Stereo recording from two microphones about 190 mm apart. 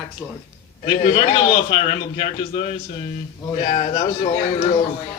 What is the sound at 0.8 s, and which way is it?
A man's voice, 25° left (ahead or behind).